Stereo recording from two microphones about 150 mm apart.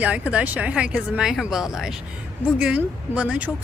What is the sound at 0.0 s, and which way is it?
A woman's voice, 10° right (ahead or behind).